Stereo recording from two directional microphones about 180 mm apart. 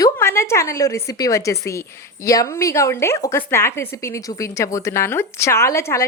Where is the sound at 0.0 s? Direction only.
15° left (ahead or behind).